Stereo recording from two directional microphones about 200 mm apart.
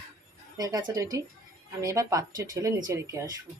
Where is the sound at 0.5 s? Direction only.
15° right (ahead or behind).